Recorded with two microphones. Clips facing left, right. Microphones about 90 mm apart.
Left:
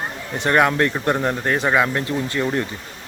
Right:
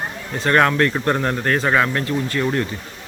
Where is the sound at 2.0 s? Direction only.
25° left (ahead or behind).